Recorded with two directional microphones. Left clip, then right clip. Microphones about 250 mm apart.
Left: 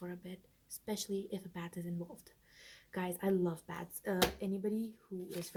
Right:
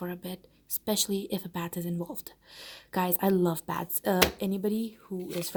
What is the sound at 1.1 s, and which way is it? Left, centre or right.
Speech, right.